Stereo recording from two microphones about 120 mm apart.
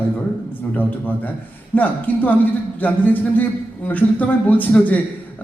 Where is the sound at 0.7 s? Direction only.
15° left (ahead or behind).